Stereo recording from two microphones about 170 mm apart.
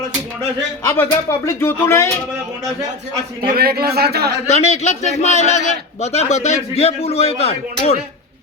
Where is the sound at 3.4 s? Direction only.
65° right (ahead or behind).